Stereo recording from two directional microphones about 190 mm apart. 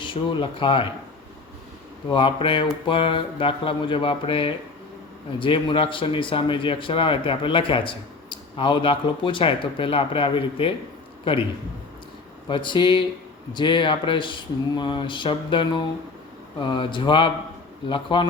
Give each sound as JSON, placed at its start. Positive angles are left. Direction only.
{"t": 0.0, "sound": "speech", "side_deg": 25}
{"t": 2.0, "sound": "speech", "side_deg": 25}
{"t": 12.5, "sound": "speech", "side_deg": 25}